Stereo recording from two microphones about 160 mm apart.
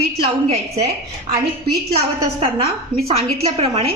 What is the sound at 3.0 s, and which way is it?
Speech, 40° right (ahead or behind).